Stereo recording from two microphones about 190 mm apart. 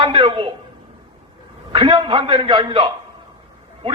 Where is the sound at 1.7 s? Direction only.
30° right (ahead or behind).